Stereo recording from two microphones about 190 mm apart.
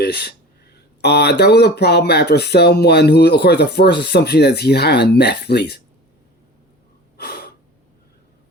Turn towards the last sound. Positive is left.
turn(degrees=55)  # may be behind; listen again after turning